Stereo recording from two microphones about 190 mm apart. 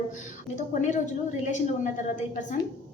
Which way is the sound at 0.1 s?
40° left (ahead or behind).